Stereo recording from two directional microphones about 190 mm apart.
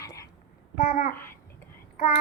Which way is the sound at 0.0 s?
15° left (ahead or behind).